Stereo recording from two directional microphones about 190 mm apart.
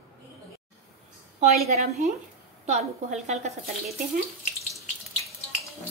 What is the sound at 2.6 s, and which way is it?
Speech, 40° right (ahead or behind).